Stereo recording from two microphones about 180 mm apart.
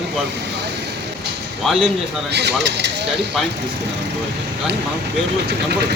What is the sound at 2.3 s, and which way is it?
Speech, 70° right (ahead or behind).